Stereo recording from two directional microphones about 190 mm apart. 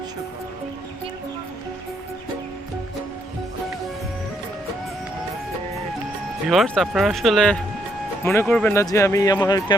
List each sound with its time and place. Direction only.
6.5 s speech: centre (ahead or behind)
8.2 s speech: 15° left (ahead or behind)
8.7 s speech: 15° left (ahead or behind)